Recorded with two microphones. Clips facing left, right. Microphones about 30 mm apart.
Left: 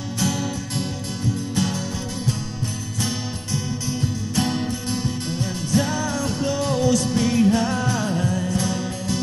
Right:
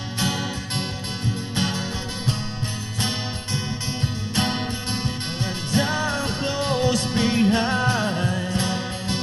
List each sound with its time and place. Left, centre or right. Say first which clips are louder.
0.2 s music: left 1 dB; right
4.4 s music: left 1 dB; right